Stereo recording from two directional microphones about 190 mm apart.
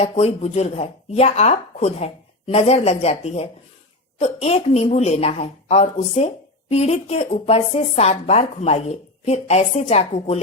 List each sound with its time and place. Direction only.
0.0 s a woman's voice: 35° left (ahead or behind)